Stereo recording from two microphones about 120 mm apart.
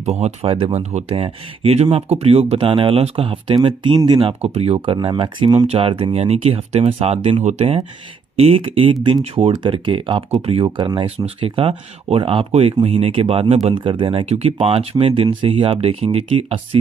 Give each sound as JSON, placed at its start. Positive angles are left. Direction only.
{"t": 0.0, "sound": "speech", "side_deg": -65}
{"t": 1.1, "sound": "speech", "side_deg": -50}
{"t": 4.9, "sound": "speech", "side_deg": -45}
{"t": 13.7, "sound": "speech", "side_deg": -45}